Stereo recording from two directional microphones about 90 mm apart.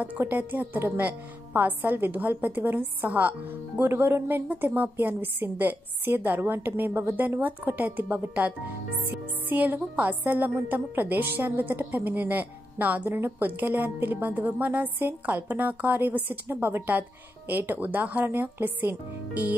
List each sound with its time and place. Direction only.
0.0 s a woman's voice: 20° right (ahead or behind)